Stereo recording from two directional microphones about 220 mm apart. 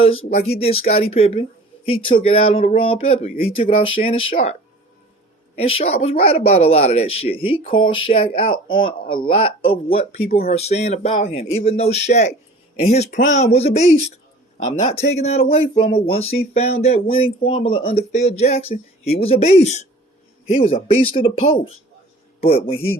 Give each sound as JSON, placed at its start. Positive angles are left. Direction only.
{"t": 0.6, "sound": "speech", "side_deg": 25}
{"t": 5.5, "sound": "speech", "side_deg": 25}
{"t": 10.2, "sound": "speech", "side_deg": 45}
{"t": 10.5, "sound": "speech", "side_deg": 30}
{"t": 20.8, "sound": "speech", "side_deg": 25}